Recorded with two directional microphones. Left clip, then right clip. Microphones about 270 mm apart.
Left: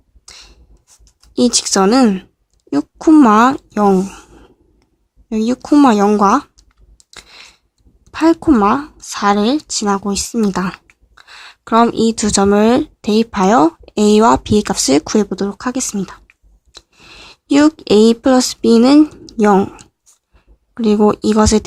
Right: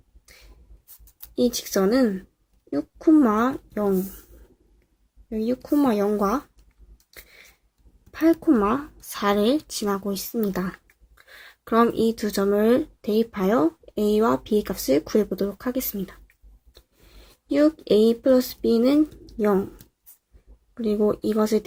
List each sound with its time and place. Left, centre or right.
1.4 s speech: left
5.3 s speech: left
6.9 s a sound: left
8.1 s speech: centre
17.5 s speech: left
20.7 s speech: left